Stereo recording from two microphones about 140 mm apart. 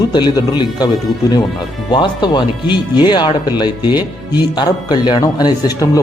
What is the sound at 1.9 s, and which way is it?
Speech, 35° left (ahead or behind).